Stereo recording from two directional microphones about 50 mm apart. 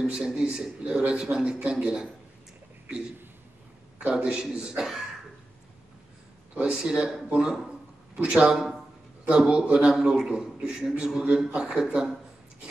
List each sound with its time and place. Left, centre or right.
0.0 s a man's voice: centre
4.0 s speech: centre
6.7 s speech: centre
8.5 s a sound: centre
9.5 s a man's voice: right